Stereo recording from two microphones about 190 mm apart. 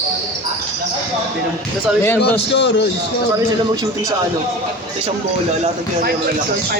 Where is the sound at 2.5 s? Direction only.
65° left (ahead or behind).